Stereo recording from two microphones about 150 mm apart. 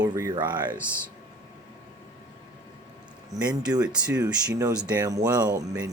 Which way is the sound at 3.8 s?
5° right (ahead or behind).